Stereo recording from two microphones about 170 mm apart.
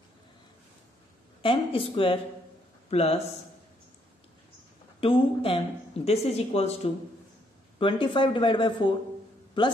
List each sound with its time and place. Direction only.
1.4 s speech: 35° left (ahead or behind)
5.0 s speech: 30° left (ahead or behind)